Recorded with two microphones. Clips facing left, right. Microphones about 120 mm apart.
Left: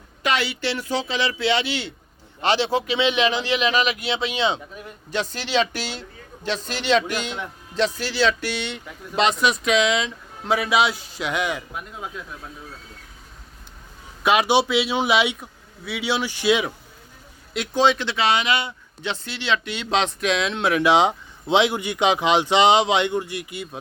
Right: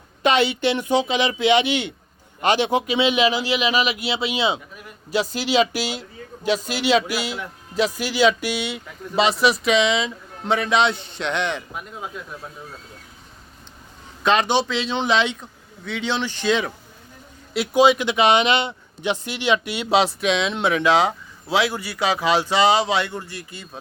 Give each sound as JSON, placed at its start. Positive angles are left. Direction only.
{"t": 0.2, "sound": "speech", "side_deg": -20}
{"t": 14.3, "sound": "speech", "side_deg": 10}
{"t": 17.5, "sound": "speech", "side_deg": -10}
{"t": 20.8, "sound": "speech", "side_deg": 15}